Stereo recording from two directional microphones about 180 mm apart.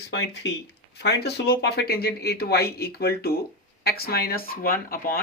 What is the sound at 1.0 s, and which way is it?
Speech, 65° left (ahead or behind).